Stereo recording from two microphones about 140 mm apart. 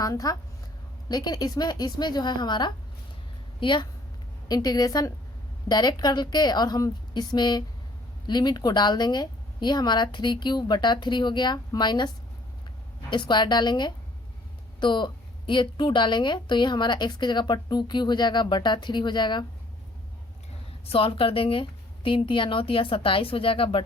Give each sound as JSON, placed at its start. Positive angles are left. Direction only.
{"t": 0.0, "sound": "a woman's voice", "side_deg": 25}
{"t": 20.8, "sound": "a woman's voice", "side_deg": 40}